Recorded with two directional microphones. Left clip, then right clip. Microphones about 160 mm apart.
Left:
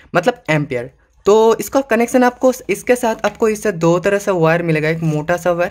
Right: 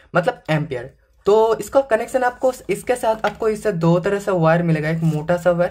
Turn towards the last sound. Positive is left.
turn(degrees=30)  # may be behind; listen again after turning